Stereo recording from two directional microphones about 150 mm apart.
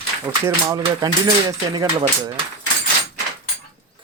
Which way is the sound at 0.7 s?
25° right (ahead or behind).